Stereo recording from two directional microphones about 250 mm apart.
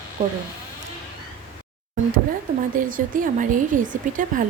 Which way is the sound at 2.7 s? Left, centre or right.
Right.